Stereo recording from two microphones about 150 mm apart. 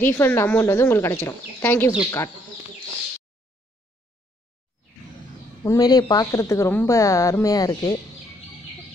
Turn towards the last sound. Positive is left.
turn(degrees=25)  # may be behind; listen again after turning